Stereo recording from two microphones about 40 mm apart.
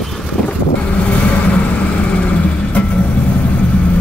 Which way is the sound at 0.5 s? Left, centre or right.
Left.